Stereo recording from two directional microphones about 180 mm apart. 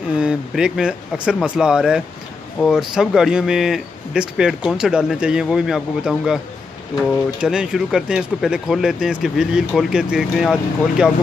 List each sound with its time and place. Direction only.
0.2 s speech: 5° right (ahead or behind)